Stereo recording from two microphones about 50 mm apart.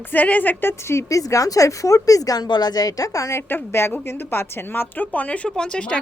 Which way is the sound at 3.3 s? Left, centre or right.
Left.